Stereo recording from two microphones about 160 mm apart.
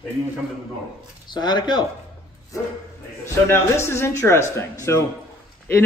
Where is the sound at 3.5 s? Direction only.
15° left (ahead or behind).